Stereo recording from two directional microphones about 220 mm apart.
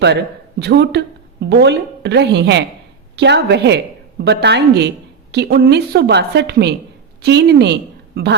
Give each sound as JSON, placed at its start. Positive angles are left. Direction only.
{"t": 0.6, "sound": "a woman's voice", "side_deg": -50}